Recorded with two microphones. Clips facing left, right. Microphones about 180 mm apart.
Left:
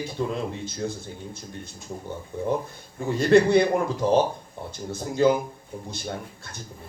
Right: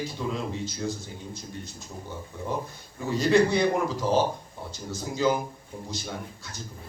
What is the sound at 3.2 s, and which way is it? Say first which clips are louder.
Speech: left 4 dB; 55° left (ahead or behind).